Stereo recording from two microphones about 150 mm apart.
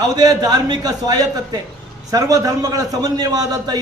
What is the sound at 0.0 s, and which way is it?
A man's voice, 25° right (ahead or behind).